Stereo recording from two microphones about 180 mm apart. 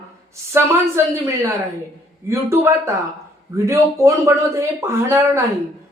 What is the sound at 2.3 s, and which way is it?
Speech, 15° right (ahead or behind).